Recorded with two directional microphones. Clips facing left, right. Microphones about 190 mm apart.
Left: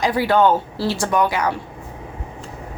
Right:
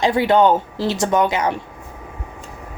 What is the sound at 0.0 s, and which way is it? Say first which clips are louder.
Speech: right 2 dB; 25° right (ahead or behind).